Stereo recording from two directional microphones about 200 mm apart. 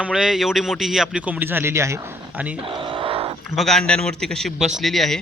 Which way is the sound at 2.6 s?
25° right (ahead or behind).